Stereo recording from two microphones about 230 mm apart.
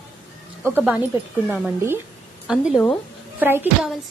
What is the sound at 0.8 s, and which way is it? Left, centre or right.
A woman's voice, centre.